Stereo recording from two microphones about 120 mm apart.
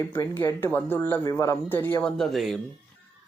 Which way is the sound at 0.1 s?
20° left (ahead or behind).